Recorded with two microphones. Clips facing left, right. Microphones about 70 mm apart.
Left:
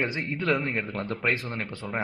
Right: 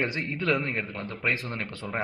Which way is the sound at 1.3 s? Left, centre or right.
Left.